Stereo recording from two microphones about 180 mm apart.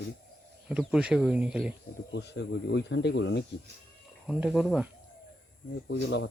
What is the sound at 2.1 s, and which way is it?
Speech, 70° left (ahead or behind).